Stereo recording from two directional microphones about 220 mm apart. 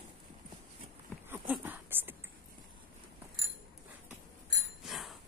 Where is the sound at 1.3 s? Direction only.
10° right (ahead or behind).